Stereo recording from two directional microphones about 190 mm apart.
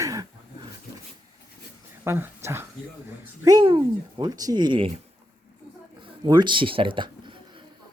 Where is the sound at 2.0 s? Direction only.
10° right (ahead or behind).